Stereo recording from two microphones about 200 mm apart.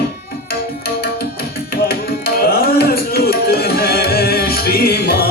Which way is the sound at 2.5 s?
50° left (ahead or behind).